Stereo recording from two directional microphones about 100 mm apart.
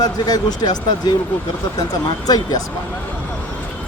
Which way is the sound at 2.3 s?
40° left (ahead or behind).